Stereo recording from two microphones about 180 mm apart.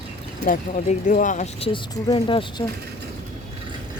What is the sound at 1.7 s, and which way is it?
Speech, 25° left (ahead or behind).